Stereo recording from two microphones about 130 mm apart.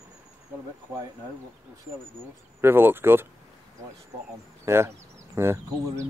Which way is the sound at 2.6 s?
15° right (ahead or behind).